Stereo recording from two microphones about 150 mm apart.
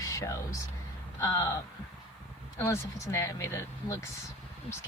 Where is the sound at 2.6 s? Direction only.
20° left (ahead or behind).